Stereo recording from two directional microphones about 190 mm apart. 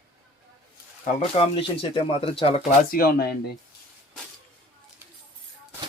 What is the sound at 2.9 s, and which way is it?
Speech, 50° left (ahead or behind).